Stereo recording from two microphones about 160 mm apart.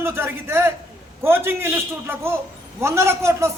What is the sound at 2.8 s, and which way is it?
Speech, 15° right (ahead or behind).